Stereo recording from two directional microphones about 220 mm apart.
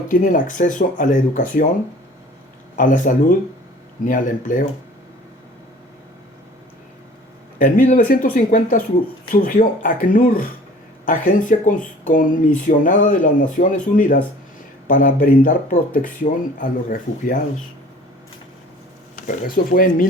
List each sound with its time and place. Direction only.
0.1 s speech: 40° left (ahead or behind)
2.7 s speech: 35° left (ahead or behind)
7.6 s speech: 40° left (ahead or behind)
19.3 s speech: 40° left (ahead or behind)